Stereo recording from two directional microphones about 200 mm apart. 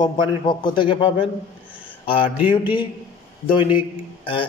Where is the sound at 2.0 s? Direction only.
25° left (ahead or behind).